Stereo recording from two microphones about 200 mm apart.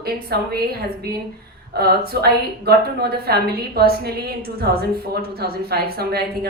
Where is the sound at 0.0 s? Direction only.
50° right (ahead or behind).